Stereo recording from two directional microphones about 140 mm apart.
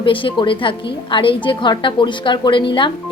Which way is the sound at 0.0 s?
35° left (ahead or behind).